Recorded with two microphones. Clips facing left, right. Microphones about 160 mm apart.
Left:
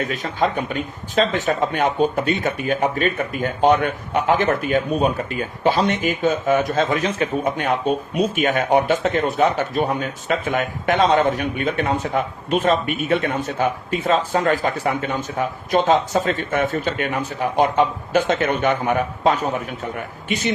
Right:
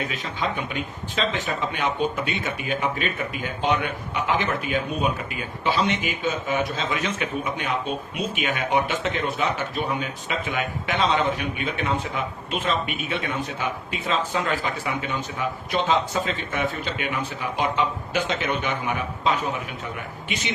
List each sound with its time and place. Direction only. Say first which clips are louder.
0.0 s speech: left 7 dB; 40° left (ahead or behind)